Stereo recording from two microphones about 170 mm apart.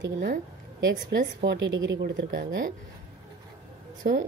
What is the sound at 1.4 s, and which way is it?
Speech, 90° right.